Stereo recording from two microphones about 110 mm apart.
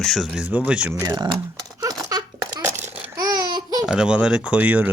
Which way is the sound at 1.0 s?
40° right (ahead or behind).